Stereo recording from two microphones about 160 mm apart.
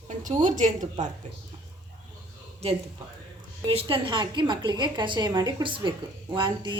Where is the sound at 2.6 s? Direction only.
40° right (ahead or behind).